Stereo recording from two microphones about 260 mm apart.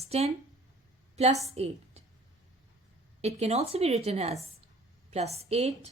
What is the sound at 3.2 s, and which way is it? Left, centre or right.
A woman's voice, right.